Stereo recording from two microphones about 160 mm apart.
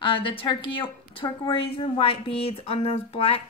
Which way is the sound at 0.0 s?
35° left (ahead or behind).